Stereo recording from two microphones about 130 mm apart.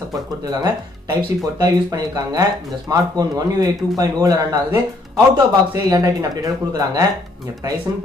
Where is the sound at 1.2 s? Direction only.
30° right (ahead or behind).